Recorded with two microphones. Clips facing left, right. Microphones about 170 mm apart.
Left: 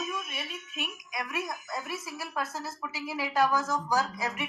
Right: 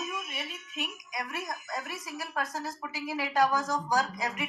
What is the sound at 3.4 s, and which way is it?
Speech, 35° right (ahead or behind).